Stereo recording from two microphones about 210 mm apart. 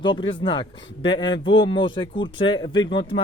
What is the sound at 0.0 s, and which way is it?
Speech, 25° left (ahead or behind).